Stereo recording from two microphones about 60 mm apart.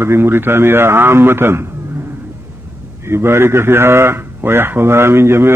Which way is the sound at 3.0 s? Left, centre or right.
Right.